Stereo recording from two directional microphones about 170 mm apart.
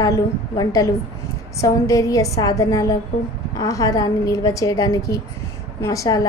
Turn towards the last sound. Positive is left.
turn(degrees=20)  # may be behind; listen again after turning